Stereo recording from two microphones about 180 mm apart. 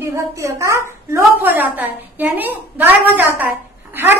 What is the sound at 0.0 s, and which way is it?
Speech, 15° right (ahead or behind).